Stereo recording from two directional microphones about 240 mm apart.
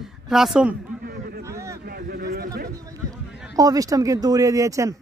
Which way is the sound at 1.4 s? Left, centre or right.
Centre.